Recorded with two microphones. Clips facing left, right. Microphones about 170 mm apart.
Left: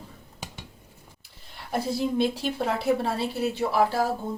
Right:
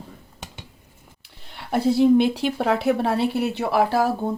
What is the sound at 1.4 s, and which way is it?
Speech, 70° right (ahead or behind).